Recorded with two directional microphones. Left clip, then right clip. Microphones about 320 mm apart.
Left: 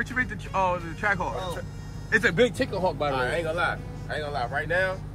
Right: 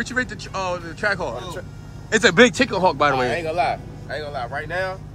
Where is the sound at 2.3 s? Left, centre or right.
Right.